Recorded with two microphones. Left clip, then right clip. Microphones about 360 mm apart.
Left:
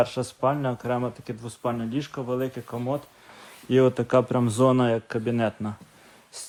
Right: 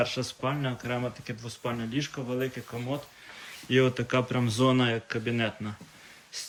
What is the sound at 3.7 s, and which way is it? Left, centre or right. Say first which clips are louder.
Speech: left 5 dB; centre.